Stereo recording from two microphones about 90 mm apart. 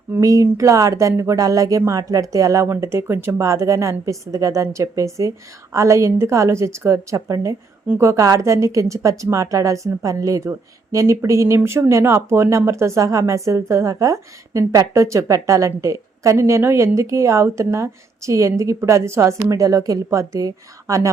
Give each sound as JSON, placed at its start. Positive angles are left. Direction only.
{"t": 0.2, "sound": "speech", "side_deg": -40}